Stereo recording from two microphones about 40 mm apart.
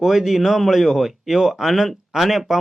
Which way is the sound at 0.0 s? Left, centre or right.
Centre.